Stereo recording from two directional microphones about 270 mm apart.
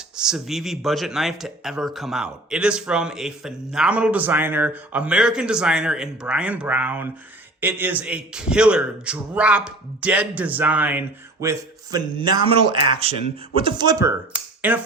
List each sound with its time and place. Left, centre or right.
0.2 s speech: centre
14.3 s finger snapping: centre